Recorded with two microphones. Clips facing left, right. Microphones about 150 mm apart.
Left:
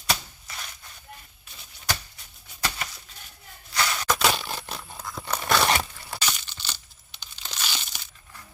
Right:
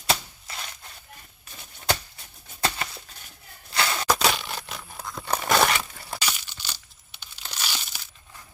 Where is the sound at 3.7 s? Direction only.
30° right (ahead or behind).